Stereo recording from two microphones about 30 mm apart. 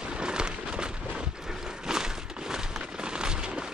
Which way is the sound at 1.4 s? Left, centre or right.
Centre.